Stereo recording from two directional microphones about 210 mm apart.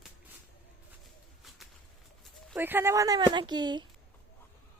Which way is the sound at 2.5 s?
10° right (ahead or behind).